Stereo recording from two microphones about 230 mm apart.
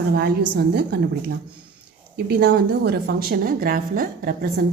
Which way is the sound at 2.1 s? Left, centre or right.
Right.